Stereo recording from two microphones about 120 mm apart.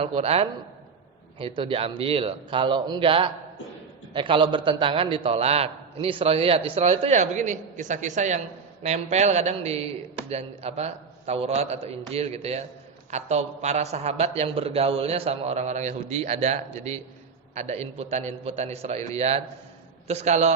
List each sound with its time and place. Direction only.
0.0 s a man's voice: 55° right (ahead or behind); by 8.4 s 90° right
8.8 s a man's voice: 70° right (ahead or behind)